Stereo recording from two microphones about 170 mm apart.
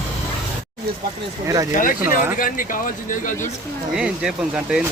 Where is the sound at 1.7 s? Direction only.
50° left (ahead or behind).